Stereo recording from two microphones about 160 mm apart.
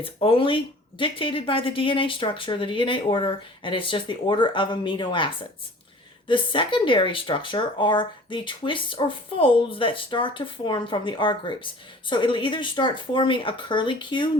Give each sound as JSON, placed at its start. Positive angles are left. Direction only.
{"t": 0.0, "sound": "speech", "side_deg": 35}